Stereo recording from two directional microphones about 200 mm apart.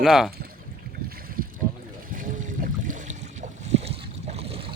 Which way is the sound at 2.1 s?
40° right (ahead or behind).